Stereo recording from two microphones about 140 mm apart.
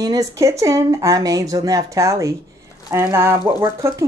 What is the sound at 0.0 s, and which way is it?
Speech, 25° right (ahead or behind).